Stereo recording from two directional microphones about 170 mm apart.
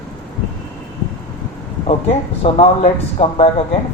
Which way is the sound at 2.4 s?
35° left (ahead or behind).